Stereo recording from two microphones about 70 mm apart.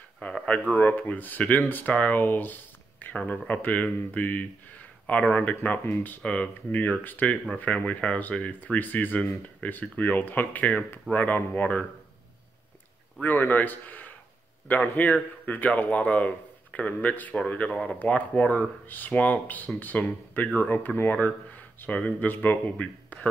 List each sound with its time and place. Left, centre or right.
0.2 s speech: centre
0.7 s speech: left
13.2 s speech: left